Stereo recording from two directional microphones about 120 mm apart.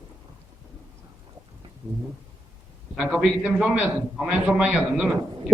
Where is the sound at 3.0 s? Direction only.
5° right (ahead or behind).